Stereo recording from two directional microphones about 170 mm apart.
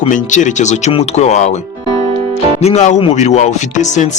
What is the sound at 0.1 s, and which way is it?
Speech, 45° left (ahead or behind).